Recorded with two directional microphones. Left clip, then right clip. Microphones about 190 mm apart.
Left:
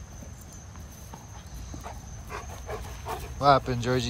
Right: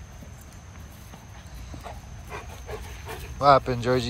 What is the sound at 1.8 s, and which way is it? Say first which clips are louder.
Wild animals: right 2 dB; 5° right (ahead or behind).